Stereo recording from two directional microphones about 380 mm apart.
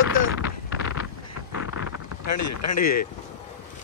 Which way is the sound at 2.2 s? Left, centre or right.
Left.